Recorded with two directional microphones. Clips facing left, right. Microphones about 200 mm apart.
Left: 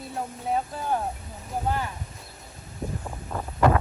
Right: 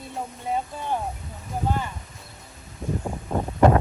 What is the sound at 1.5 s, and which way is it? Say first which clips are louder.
Speech: right 1 dB; 5° left (ahead or behind).